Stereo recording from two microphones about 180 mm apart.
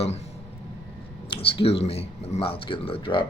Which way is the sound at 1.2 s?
30° left (ahead or behind).